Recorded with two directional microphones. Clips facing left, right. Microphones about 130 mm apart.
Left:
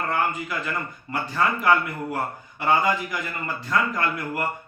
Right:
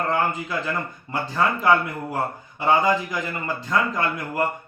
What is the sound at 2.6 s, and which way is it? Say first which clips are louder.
Speech: right 2 dB; 20° right (ahead or behind).